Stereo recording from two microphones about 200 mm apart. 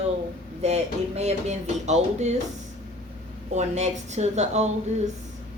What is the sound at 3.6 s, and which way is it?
Speech, 35° right (ahead or behind).